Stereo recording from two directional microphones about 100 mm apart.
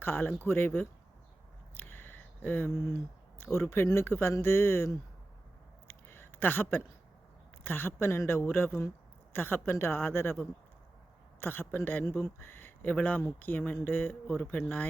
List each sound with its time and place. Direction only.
0.0 s speech: 20° left (ahead or behind)
5.9 s a sound: 25° left (ahead or behind)
7.6 s speech: 20° left (ahead or behind)